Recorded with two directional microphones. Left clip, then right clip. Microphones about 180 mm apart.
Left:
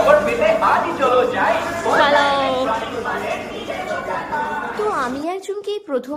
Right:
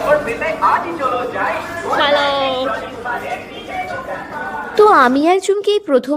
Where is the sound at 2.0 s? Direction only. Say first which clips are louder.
Right 1 dB; 5° right (ahead or behind).